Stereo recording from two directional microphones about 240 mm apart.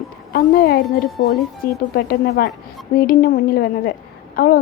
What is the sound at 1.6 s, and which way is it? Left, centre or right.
Speech, left.